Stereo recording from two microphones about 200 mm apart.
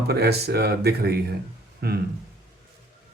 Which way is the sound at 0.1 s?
55° right (ahead or behind).